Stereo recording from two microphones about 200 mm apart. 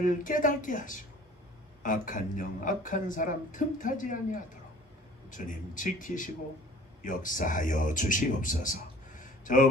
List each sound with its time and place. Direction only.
0.0 s a man's voice: 40° left (ahead or behind)